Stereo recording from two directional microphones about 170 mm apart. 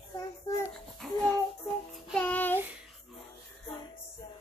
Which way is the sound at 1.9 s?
10° left (ahead or behind).